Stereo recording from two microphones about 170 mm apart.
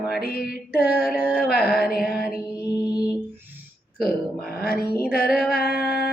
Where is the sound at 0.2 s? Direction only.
60° left (ahead or behind).